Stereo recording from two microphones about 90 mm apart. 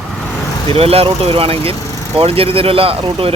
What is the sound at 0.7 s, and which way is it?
Speech, 90° right.